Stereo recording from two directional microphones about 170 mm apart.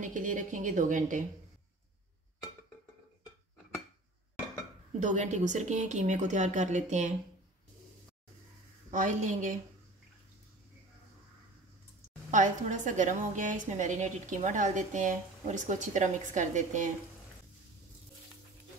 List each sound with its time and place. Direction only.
0.0 s a woman's voice: 50° right (ahead or behind)
5.0 s a woman's voice: 45° right (ahead or behind)
8.9 s a woman's voice: 45° right (ahead or behind)
12.3 s a woman's voice: 45° right (ahead or behind)